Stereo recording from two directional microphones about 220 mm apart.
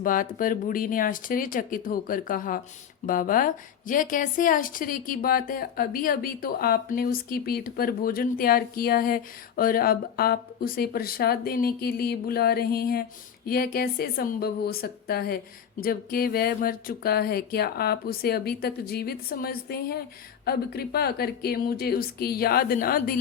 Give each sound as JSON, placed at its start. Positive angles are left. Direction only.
{"t": 0.0, "sound": "a woman's voice", "side_deg": 40}